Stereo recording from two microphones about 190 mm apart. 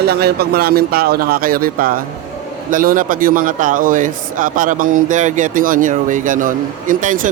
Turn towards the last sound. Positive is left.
turn(degrees=-45)  # may be behind; listen again after turning